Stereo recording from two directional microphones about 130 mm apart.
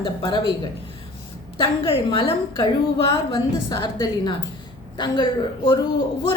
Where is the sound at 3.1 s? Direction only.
30° left (ahead or behind).